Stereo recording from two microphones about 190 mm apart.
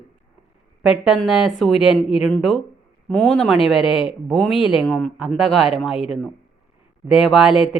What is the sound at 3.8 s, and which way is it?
Speech, 25° left (ahead or behind).